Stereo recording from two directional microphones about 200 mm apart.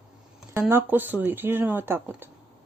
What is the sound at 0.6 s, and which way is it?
Speech, 10° right (ahead or behind).